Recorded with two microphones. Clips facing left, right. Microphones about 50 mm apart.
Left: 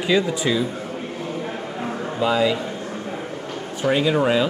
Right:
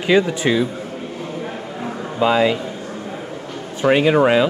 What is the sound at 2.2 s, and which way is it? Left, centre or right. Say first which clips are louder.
Speech: right 4 dB; right.